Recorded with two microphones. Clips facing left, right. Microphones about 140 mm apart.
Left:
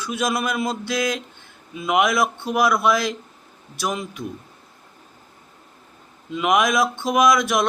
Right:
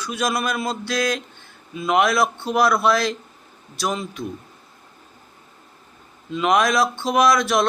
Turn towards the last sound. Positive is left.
turn(degrees=15)  # may be behind; listen again after turning